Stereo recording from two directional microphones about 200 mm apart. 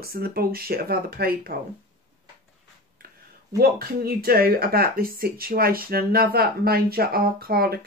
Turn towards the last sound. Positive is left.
turn(degrees=-50)  # may be behind; listen again after turning